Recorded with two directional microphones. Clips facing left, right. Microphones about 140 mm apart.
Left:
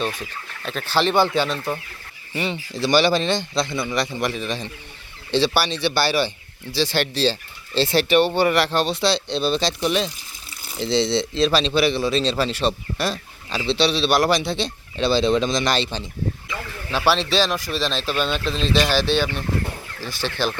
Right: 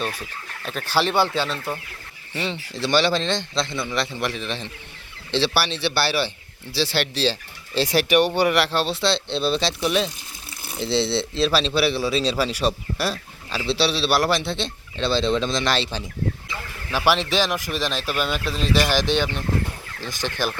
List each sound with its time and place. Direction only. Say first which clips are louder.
0.0 s speech: left 2 dB; 5° right (ahead or behind)
2.3 s a man's voice: left 2 dB; 5° left (ahead or behind)
17.1 s speech: left 1 dB; 15° right (ahead or behind)